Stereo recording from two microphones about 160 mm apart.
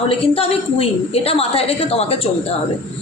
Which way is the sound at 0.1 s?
35° left (ahead or behind).